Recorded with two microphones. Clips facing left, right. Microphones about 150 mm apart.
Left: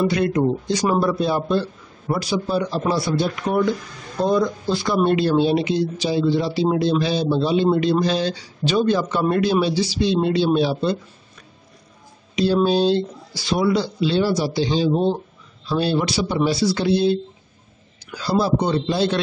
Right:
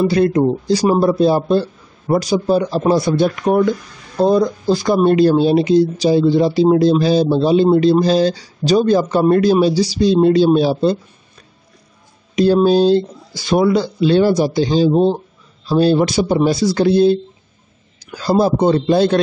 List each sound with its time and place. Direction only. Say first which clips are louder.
0.0 s speech: right 5 dB; 35° right (ahead or behind); by 3.6 s 50° right (ahead or behind)
4.2 s speech: right 5 dB; 35° right (ahead or behind)
12.6 s speech: right 6 dB; 40° right (ahead or behind)
14.9 s speech: right 5 dB; 30° right (ahead or behind); by 19.2 s 50° right (ahead or behind)